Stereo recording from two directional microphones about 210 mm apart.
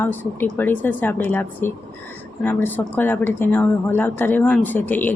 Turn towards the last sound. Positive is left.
turn(degrees=10)  # may be behind; listen again after turning